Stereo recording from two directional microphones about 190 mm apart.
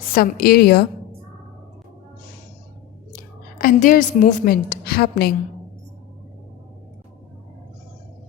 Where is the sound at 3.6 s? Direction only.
45° left (ahead or behind).